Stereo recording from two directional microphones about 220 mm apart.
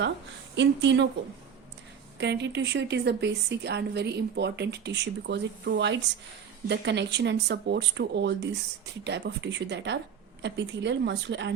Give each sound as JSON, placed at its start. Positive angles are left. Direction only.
{"t": 0.5, "sound": "speech", "side_deg": -55}
{"t": 2.1, "sound": "speech", "side_deg": -50}